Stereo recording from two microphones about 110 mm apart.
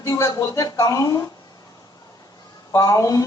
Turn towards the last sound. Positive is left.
turn(degrees=30)  # may be behind; listen again after turning